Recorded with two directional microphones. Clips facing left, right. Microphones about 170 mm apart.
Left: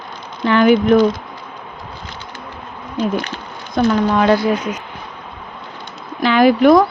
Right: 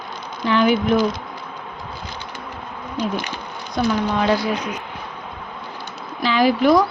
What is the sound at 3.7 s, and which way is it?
Speech, 60° left (ahead or behind).